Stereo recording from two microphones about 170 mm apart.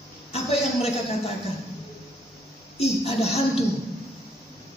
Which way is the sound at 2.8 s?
35° left (ahead or behind).